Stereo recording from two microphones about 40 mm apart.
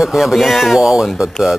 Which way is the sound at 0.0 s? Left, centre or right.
Centre.